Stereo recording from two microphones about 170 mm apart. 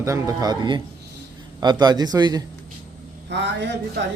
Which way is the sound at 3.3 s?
90° right.